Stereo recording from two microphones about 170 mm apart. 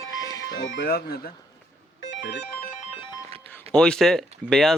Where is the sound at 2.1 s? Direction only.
90° left.